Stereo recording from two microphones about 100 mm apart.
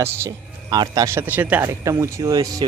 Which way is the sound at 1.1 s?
20° right (ahead or behind).